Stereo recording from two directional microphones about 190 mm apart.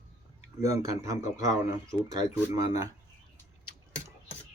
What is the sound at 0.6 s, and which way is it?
Speech, 15° right (ahead or behind).